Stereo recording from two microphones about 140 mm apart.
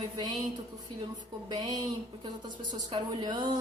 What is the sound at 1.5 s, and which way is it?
A woman's voice, 25° right (ahead or behind).